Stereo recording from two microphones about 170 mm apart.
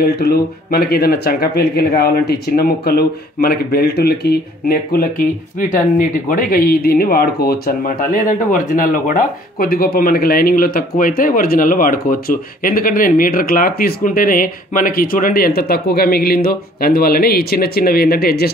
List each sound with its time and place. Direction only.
0.0 s speech: 65° left (ahead or behind)